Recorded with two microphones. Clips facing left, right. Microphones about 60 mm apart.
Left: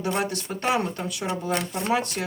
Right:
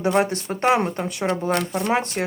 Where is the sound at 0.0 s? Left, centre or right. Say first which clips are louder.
Right 6 dB; right.